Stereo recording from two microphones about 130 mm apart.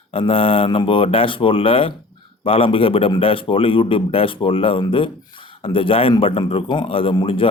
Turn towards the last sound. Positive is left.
turn(degrees=45)  # may be behind; listen again after turning